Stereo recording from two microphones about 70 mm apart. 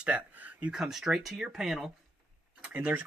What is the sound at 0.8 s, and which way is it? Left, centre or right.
Speech, centre.